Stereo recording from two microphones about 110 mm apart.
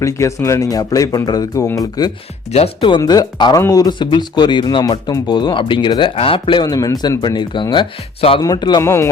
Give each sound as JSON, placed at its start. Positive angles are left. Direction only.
{"t": 0.0, "sound": "speech", "side_deg": 30}
{"t": 2.5, "sound": "speech", "side_deg": 70}
{"t": 3.0, "sound": "speech", "side_deg": 35}
{"t": 6.1, "sound": "speech", "side_deg": 55}
{"t": 8.8, "sound": "speech", "side_deg": 25}